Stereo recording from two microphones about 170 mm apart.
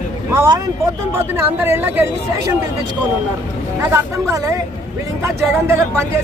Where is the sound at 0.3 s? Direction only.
15° right (ahead or behind).